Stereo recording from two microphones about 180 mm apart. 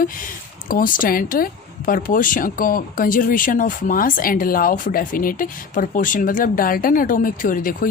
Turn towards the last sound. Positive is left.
turn(degrees=50)  # may be behind; listen again after turning